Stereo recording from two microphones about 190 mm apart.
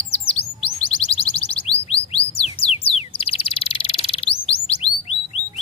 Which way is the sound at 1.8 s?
30° left (ahead or behind).